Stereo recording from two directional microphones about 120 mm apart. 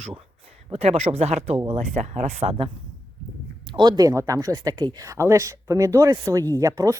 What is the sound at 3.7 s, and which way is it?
Speech, 35° right (ahead or behind).